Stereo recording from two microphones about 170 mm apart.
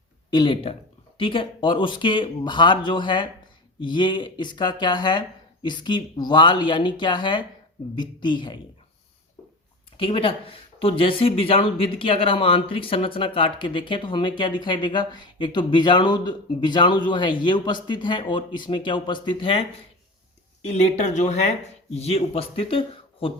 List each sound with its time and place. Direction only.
0.3 s speech: 25° left (ahead or behind)
10.0 s speech: 30° left (ahead or behind)
20.7 s speech: 40° left (ahead or behind)